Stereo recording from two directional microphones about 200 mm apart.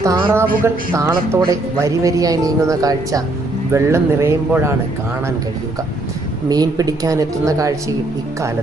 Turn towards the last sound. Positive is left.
turn(degrees=-15)  # may be behind; listen again after turning